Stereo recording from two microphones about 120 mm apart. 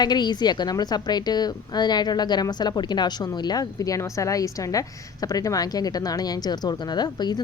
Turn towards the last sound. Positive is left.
turn(degrees=35)  # may be behind; listen again after turning